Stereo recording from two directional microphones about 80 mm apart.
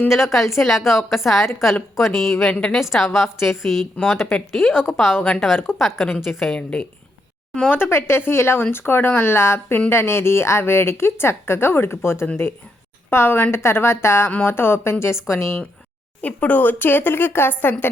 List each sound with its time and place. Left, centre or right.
0.1 s a woman's voice: centre
2.5 s a woman's voice: centre
2.7 s a woman's voice: centre
6.5 s a woman's voice: centre
7.8 s speech: left
16.2 s speech: left